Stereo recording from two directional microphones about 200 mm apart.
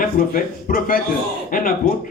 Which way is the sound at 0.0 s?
45° left (ahead or behind).